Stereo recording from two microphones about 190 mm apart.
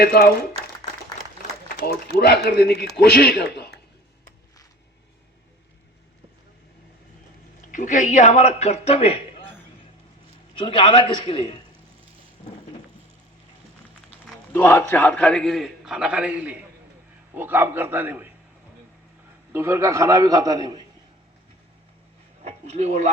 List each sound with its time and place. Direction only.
0.0 s speech: 55° left (ahead or behind)
1.6 s a man's voice: 55° left (ahead or behind)
7.7 s a man's voice: 40° left (ahead or behind)
10.5 s a man's voice: 25° left (ahead or behind)
14.5 s a man's voice: 15° left (ahead or behind); by 18.3 s 10° right (ahead or behind)
19.5 s a man's voice: 15° right (ahead or behind)
22.4 s speech: 35° right (ahead or behind)